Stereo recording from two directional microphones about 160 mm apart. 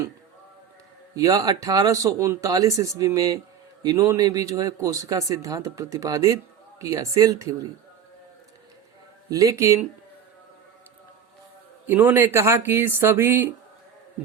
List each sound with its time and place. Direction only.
1.1 s speech: 20° right (ahead or behind)
9.3 s speech: 20° right (ahead or behind)
11.9 s speech: 10° right (ahead or behind)